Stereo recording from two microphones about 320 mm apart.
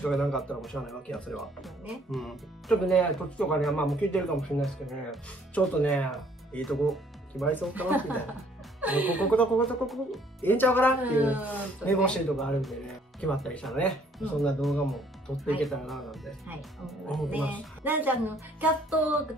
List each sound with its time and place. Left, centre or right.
0.0 s speech: centre
11.0 s speech: centre